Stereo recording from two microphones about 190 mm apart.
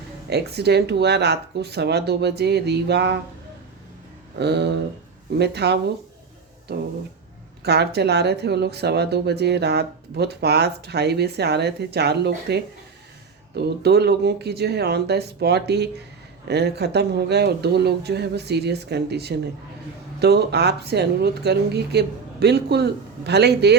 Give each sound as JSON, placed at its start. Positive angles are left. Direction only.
{"t": 0.3, "sound": "speech", "side_deg": -60}
{"t": 4.4, "sound": "speech", "side_deg": -60}
{"t": 7.6, "sound": "speech", "side_deg": -60}